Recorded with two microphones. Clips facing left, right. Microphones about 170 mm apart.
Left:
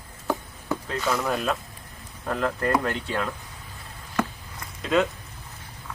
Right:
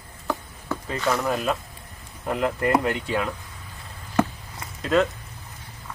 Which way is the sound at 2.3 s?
15° right (ahead or behind).